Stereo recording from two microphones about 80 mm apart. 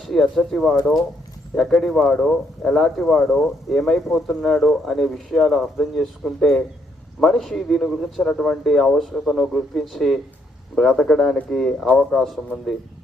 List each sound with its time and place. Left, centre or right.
0.0 s speech: centre